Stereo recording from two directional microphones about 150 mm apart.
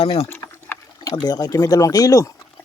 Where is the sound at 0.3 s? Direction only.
15° left (ahead or behind).